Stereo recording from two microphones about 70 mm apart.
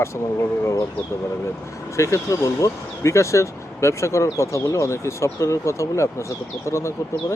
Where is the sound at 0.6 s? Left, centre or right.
Left.